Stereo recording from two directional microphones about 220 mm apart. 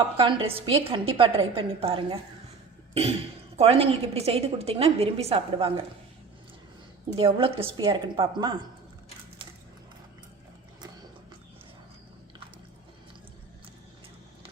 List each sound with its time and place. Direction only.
0.2 s a woman's voice: 25° right (ahead or behind)
2.9 s cough: 25° right (ahead or behind)
3.6 s a woman's voice: 25° right (ahead or behind)
7.2 s a woman's voice: 25° right (ahead or behind)